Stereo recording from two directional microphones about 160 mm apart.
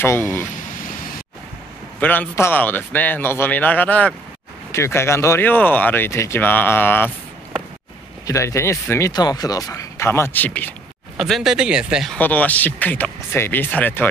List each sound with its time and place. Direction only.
0.0 s speech: 15° left (ahead or behind)
2.0 s speech: 10° left (ahead or behind)
8.3 s speech: 20° left (ahead or behind)
11.1 s speech: centre (ahead or behind)
12.2 s speech: 10° left (ahead or behind)